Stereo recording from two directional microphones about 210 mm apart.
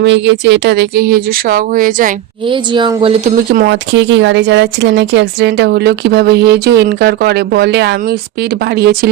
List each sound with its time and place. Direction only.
0.0 s speech: 55° right (ahead or behind); by 2.1 s 40° right (ahead or behind)
2.5 s a woman's voice: 20° right (ahead or behind)
3.5 s speech: 50° right (ahead or behind)